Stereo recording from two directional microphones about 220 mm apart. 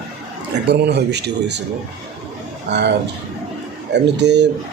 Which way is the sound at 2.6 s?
50° right (ahead or behind).